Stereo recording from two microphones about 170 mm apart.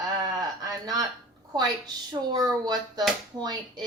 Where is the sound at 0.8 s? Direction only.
20° right (ahead or behind).